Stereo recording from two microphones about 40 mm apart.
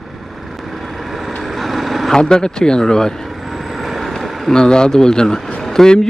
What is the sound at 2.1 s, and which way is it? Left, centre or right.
Speech, centre.